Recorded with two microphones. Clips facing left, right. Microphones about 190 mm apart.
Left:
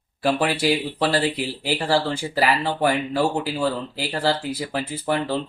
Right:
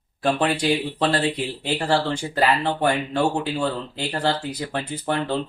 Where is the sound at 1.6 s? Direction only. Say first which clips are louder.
Even; 5° left (ahead or behind).